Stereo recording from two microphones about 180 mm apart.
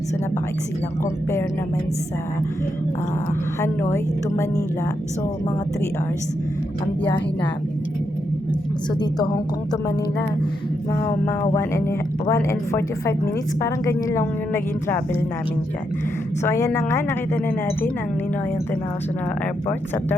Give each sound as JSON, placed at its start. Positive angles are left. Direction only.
{"t": 1.0, "sound": "a woman's voice", "side_deg": 15}
{"t": 3.9, "sound": "a woman's voice", "side_deg": 15}
{"t": 9.0, "sound": "a woman's voice", "side_deg": 20}
{"t": 10.9, "sound": "a woman's voice", "side_deg": 15}
{"t": 16.4, "sound": "a woman's voice", "side_deg": 15}